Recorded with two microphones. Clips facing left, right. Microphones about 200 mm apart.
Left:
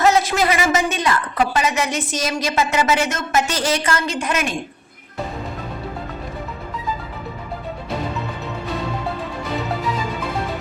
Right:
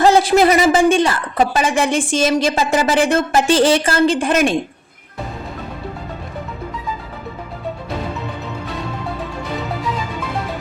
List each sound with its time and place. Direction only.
0.0 s a woman's voice: 30° right (ahead or behind)